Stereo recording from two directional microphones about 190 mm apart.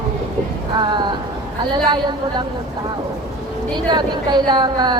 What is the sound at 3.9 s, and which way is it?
Speech, 25° right (ahead or behind).